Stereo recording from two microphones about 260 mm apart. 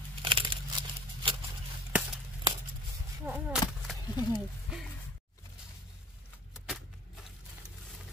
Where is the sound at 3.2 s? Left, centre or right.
Centre.